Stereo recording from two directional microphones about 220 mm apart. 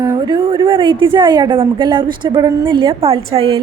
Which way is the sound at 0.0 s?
15° right (ahead or behind).